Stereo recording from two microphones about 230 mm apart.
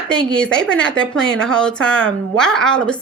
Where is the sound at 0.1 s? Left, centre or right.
Centre.